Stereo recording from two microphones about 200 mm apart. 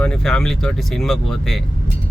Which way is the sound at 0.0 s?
5° left (ahead or behind).